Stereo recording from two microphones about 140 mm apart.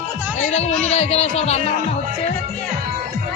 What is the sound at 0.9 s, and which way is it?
Speech, 50° left (ahead or behind).